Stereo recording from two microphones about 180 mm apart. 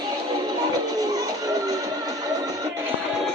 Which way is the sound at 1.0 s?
20° right (ahead or behind).